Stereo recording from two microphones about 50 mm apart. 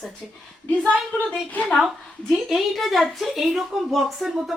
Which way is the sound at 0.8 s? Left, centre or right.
Left.